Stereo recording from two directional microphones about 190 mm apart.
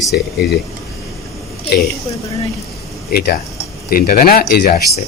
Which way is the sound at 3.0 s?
50° left (ahead or behind).